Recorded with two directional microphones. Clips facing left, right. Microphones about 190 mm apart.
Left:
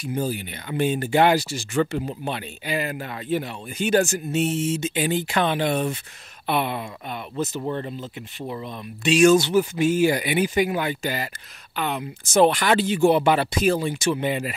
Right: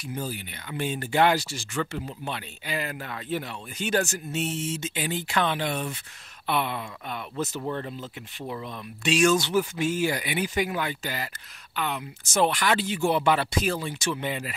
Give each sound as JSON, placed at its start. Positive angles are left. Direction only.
{"t": 0.7, "sound": "speech", "side_deg": 15}
{"t": 1.8, "sound": "speech", "side_deg": 25}
{"t": 2.3, "sound": "speech", "side_deg": 15}
{"t": 9.2, "sound": "speech", "side_deg": 10}
{"t": 13.0, "sound": "speech", "side_deg": 15}